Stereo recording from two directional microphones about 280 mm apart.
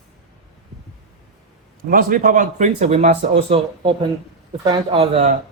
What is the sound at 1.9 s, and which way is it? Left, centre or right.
Speech, right.